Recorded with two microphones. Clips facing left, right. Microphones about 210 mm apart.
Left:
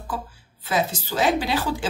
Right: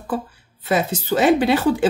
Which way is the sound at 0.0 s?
60° right (ahead or behind).